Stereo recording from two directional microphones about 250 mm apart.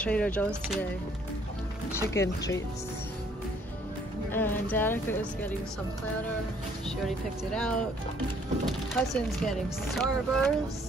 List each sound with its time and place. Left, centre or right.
0.0 s speech: centre
2.1 s speech: centre
4.3 s speech: centre
7.0 s speech: centre